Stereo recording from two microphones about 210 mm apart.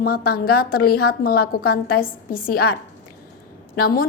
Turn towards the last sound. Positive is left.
turn(degrees=45)  # may be behind; listen again after turning